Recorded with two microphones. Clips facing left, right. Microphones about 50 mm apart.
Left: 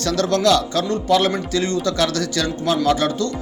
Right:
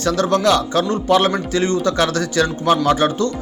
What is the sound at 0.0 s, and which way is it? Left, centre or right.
Speech, centre.